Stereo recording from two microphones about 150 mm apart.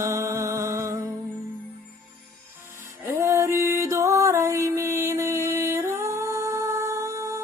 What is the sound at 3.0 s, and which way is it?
Music, 20° right (ahead or behind).